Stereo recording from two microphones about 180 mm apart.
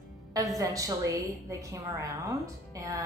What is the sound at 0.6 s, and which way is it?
A woman's voice, 20° right (ahead or behind).